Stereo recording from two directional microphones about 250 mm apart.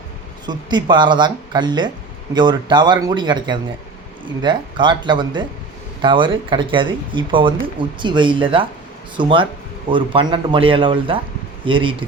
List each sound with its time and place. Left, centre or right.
0.4 s speech: centre